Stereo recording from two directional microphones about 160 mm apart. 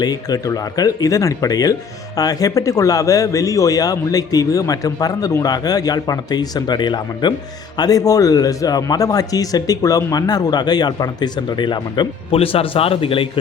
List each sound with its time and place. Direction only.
0.0 s a man's voice: 25° left (ahead or behind)